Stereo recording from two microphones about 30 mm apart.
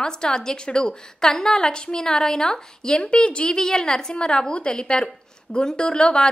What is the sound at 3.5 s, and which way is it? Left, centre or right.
A woman's voice, centre.